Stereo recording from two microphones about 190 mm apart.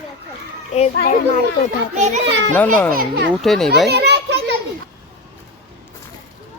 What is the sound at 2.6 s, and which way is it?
Speech, 10° left (ahead or behind).